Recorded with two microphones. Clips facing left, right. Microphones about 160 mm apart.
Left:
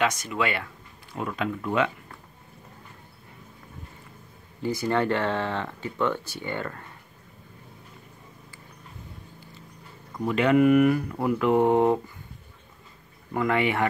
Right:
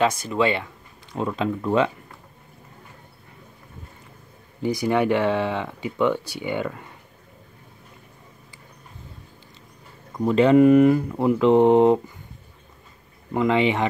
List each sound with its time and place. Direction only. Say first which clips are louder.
0.0 s speech: right 5 dB; 30° right (ahead or behind)
4.6 s speech: right 4 dB; 15° right (ahead or behind)
10.2 s speech: right 5 dB; 30° right (ahead or behind)
13.3 s speech: right 4 dB; 20° right (ahead or behind)